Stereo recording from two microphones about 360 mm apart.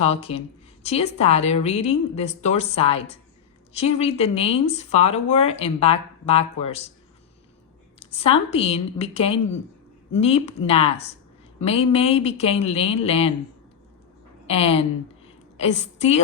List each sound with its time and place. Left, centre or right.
0.0 s a woman's voice: centre
7.9 s a woman's voice: centre
14.4 s a woman's voice: centre